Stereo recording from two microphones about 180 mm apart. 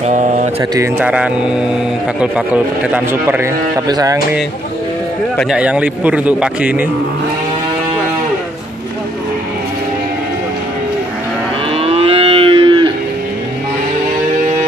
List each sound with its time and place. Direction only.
0.0 s mantra: 40° right (ahead or behind)
0.6 s a man's voice: 10° right (ahead or behind)
5.4 s a man's voice: 5° right (ahead or behind)
11.7 s moo: 35° right (ahead or behind)